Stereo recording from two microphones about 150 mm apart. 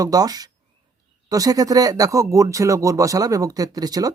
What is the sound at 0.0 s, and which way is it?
A man's voice, 25° right (ahead or behind).